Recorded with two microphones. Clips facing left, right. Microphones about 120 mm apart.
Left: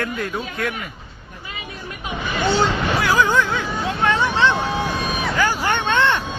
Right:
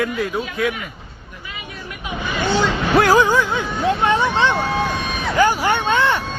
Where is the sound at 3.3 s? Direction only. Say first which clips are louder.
Right 1 dB; 10° right (ahead or behind).